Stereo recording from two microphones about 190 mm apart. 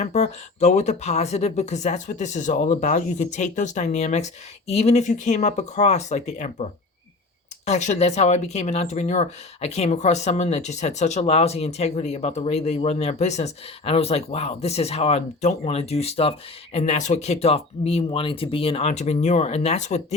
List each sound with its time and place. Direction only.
0.0 s speech: 35° left (ahead or behind)